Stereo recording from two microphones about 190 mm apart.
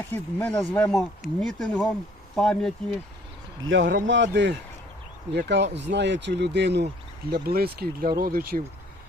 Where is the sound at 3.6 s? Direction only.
75° right (ahead or behind).